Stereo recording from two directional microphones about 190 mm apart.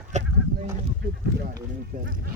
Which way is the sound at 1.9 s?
50° right (ahead or behind).